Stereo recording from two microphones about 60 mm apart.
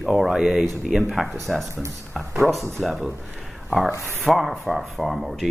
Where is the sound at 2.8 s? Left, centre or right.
Centre.